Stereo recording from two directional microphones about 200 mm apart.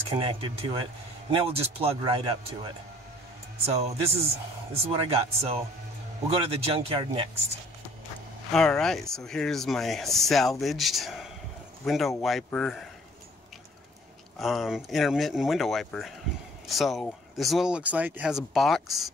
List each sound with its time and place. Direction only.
0.1 s speech: 25° right (ahead or behind)
8.5 s speech: 5° left (ahead or behind)
14.4 s speech: centre (ahead or behind)